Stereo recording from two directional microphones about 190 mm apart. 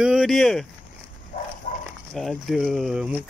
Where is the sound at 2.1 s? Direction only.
Centre (ahead or behind).